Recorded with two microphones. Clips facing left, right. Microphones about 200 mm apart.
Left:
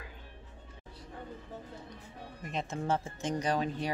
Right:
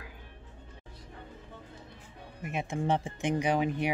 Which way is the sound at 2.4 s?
10° right (ahead or behind).